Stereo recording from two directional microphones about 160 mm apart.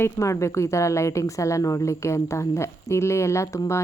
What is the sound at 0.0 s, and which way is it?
A woman's voice, 20° left (ahead or behind).